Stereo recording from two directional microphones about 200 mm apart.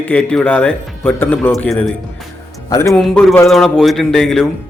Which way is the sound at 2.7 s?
15° left (ahead or behind).